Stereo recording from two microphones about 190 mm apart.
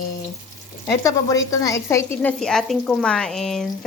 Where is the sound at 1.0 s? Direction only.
15° left (ahead or behind).